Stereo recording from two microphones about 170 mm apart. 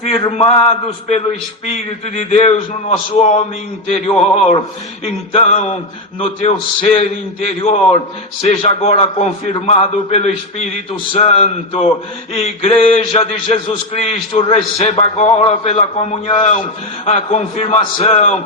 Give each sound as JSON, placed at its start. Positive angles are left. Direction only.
{"t": 0.2, "sound": "a man's voice", "side_deg": 35}